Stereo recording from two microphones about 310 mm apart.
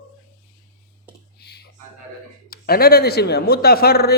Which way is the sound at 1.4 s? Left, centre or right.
Left.